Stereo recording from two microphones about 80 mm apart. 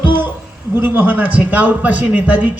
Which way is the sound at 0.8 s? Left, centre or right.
Right.